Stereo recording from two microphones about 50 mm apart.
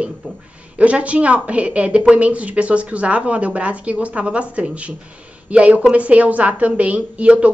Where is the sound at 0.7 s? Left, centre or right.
Right.